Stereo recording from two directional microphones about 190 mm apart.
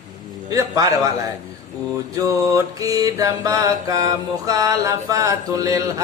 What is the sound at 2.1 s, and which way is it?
Mantra, 15° right (ahead or behind).